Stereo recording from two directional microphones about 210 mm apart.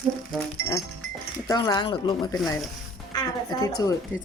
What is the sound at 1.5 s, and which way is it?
A woman's voice, 15° left (ahead or behind).